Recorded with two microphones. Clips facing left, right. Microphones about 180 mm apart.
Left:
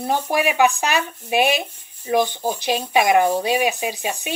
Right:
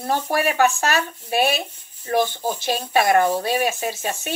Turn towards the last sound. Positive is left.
turn(degrees=15)  # may be behind; listen again after turning